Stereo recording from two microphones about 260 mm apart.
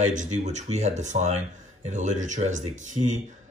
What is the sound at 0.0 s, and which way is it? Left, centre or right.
Speech, right.